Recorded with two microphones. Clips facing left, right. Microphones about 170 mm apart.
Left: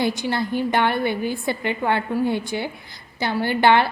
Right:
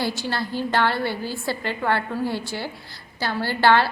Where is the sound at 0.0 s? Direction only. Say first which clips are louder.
Left 4 dB; 15° left (ahead or behind).